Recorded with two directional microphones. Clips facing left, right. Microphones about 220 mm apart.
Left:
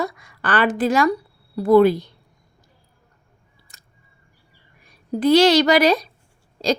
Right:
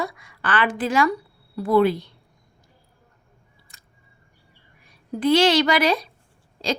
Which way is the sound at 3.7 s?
40° left (ahead or behind).